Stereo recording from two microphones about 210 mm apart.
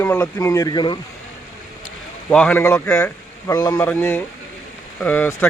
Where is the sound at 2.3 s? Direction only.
5° left (ahead or behind).